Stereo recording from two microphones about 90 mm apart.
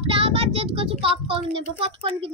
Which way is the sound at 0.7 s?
90° right.